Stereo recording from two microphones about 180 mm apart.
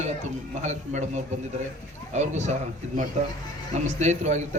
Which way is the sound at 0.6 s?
40° right (ahead or behind).